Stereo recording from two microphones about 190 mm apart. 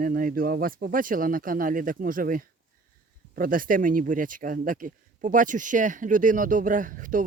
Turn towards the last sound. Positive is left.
turn(degrees=-45)  # may be behind; listen again after turning